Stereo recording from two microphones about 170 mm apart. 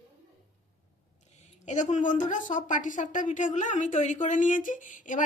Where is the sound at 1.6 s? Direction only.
45° left (ahead or behind).